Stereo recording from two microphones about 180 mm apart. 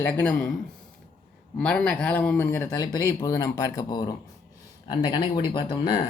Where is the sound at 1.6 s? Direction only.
5° left (ahead or behind).